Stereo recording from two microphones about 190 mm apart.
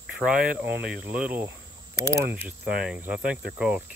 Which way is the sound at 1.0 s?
10° right (ahead or behind).